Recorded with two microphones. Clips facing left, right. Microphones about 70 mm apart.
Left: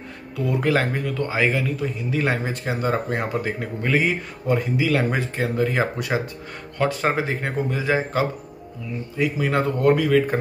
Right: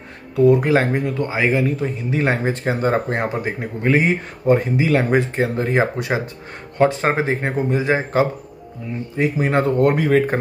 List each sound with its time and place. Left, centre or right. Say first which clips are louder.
0.6 s a man's voice: right 4 dB; right
3.3 s a man's voice: right 2 dB; right